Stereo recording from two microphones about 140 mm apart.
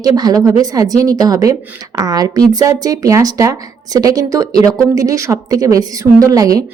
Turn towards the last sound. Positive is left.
turn(degrees=-25)  # may be behind; listen again after turning